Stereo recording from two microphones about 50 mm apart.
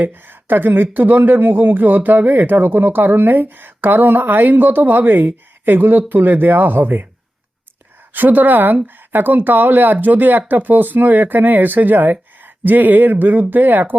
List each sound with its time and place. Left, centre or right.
0.0 s speech: right
8.1 s speech: right